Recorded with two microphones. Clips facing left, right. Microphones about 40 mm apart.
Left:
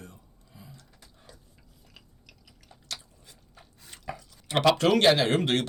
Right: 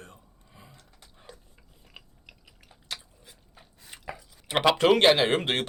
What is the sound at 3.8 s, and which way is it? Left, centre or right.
Chopping, centre.